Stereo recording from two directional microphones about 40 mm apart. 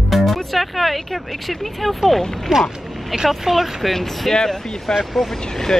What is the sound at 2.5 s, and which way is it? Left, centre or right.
Vehicle, centre.